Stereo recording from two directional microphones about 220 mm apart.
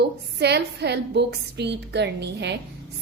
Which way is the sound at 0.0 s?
50° right (ahead or behind).